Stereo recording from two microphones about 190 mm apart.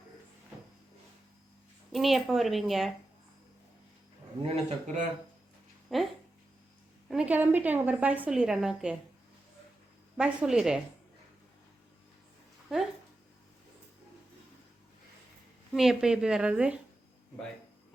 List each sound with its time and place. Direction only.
1.9 s a woman's voice: centre (ahead or behind)
4.4 s a man's voice: 35° right (ahead or behind)
5.9 s a woman's voice: centre (ahead or behind)
7.1 s a woman's voice: 5° right (ahead or behind)
10.2 s a woman's voice: 5° right (ahead or behind)
15.7 s a woman's voice: centre (ahead or behind)